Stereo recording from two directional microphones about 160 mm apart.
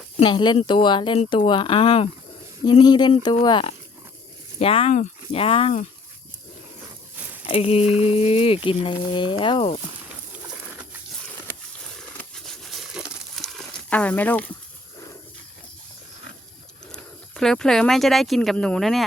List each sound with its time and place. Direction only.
0.2 s speech: 30° left (ahead or behind)
7.4 s speech: 40° left (ahead or behind)
11.9 s a sound: 5° left (ahead or behind)
16.9 s speech: 5° left (ahead or behind)